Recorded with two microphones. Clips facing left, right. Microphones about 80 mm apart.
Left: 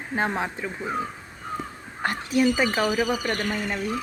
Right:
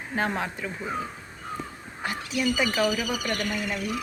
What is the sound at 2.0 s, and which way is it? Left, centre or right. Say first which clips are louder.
Speech: left 6 dB; left.